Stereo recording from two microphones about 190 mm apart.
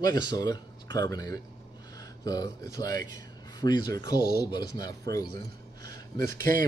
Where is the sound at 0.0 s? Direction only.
20° left (ahead or behind).